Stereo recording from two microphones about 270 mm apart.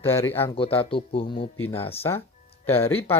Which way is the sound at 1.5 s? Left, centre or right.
Centre.